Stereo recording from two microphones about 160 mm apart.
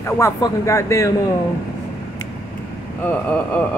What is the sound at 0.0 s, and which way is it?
Speech, 20° left (ahead or behind).